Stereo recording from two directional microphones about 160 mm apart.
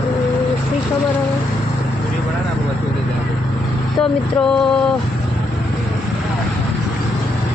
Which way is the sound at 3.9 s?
5° left (ahead or behind).